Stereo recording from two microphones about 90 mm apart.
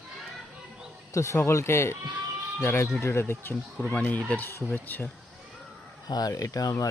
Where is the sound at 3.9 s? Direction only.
15° left (ahead or behind).